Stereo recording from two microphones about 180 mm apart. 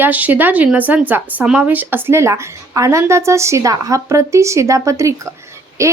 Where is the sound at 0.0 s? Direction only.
10° right (ahead or behind).